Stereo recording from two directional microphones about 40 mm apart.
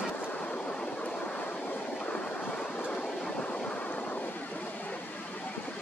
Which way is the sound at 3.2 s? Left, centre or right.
Left.